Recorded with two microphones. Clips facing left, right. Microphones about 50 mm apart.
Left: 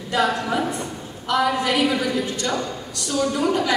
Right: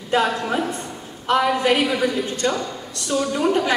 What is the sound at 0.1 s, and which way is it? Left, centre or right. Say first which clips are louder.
A woman's voice: right 1 dB; right.